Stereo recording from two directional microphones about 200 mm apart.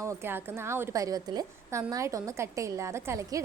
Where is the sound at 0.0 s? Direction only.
15° right (ahead or behind).